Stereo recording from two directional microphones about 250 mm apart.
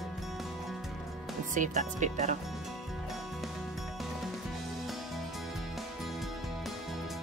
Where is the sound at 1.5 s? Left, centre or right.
Right.